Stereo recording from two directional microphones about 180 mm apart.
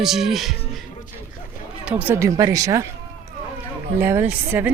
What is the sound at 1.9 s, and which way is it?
Speech, 10° right (ahead or behind).